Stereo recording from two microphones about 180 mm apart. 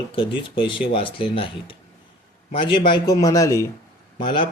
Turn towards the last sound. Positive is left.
turn(degrees=25)  # may be behind; listen again after turning